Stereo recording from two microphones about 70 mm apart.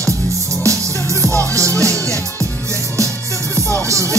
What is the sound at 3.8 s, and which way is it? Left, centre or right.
Music, right.